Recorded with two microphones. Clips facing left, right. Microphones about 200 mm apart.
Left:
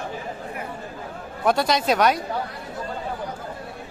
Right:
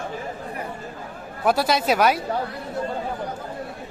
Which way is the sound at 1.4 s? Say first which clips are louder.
Even; 5° right (ahead or behind).